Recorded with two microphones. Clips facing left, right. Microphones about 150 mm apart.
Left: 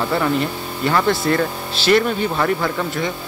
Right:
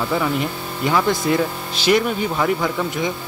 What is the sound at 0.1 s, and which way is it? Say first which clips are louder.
Speech: left 2 dB; 5° right (ahead or behind).